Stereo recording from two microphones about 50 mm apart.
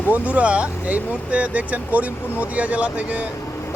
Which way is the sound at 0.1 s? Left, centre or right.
Right.